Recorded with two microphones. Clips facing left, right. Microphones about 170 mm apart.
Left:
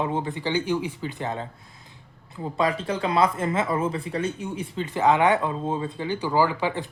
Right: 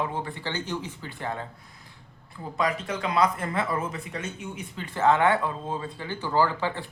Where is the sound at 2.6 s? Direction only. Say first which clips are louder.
Left 3 dB; 30° left (ahead or behind).